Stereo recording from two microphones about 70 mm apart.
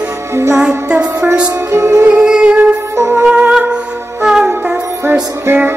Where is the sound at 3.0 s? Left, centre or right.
Right.